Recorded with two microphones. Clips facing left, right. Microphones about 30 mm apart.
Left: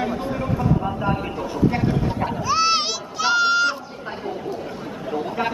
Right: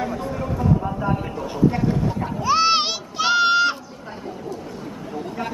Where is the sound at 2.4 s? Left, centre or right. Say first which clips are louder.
Right 3 dB; centre.